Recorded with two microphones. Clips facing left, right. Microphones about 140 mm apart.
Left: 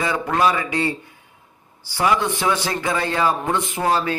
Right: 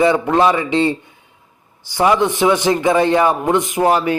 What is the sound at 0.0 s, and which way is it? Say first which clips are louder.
A man's voice: right 6 dB; 25° right (ahead or behind).